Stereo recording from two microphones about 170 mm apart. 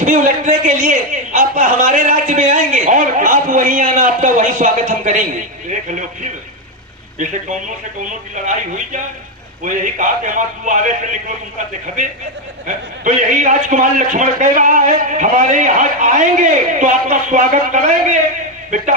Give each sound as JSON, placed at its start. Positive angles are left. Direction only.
{"t": 0.0, "sound": "a man's voice", "side_deg": -50}
{"t": 8.4, "sound": "a man's voice", "side_deg": -50}
{"t": 12.6, "sound": "a man's voice", "side_deg": -50}